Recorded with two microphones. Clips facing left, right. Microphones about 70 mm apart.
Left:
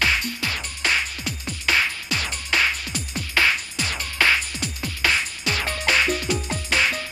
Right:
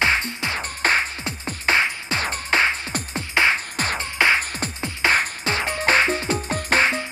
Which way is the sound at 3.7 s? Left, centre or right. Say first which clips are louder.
Right 4 dB; right.